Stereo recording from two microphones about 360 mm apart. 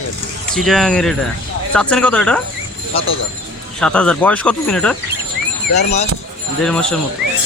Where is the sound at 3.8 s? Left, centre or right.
Centre.